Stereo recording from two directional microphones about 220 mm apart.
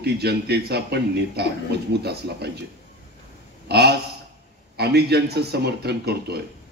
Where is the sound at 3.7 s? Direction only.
50° right (ahead or behind).